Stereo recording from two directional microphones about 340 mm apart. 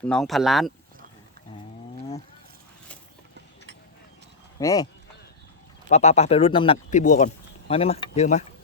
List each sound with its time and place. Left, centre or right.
0.0 s speech: centre
4.6 s speech: centre
5.9 s speech: centre